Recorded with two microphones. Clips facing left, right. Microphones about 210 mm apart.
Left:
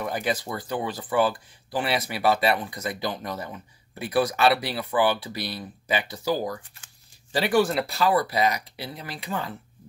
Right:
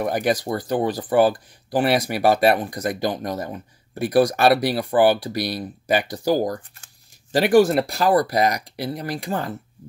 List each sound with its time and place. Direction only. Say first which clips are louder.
0.0 s speech: right 6 dB; 40° right (ahead or behind)